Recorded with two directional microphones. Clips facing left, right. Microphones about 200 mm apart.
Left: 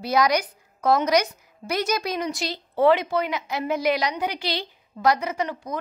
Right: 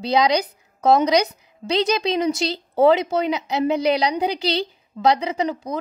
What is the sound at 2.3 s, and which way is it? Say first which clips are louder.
A woman's voice: right 7 dB; 25° right (ahead or behind).